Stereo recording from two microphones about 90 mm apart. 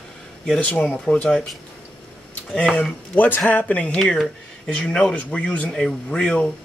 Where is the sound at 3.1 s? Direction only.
20° left (ahead or behind).